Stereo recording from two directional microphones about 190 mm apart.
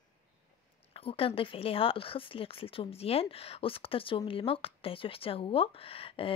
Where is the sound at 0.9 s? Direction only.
30° left (ahead or behind).